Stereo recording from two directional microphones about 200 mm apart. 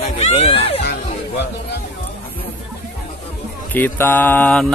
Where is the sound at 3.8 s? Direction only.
10° left (ahead or behind).